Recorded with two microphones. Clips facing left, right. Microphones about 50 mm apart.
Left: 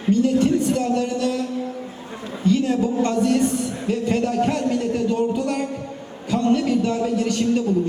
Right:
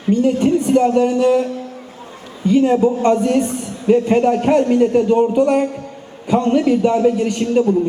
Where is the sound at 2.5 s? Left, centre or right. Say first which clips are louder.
Right 6 dB; right.